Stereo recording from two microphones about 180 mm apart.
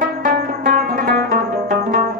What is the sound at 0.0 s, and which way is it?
Music, 50° right (ahead or behind).